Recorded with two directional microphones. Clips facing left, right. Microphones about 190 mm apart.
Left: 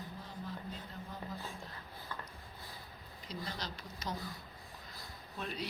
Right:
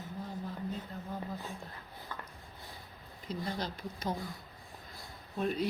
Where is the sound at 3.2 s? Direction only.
50° right (ahead or behind).